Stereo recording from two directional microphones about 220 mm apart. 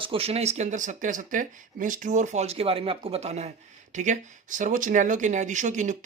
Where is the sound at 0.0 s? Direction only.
25° right (ahead or behind).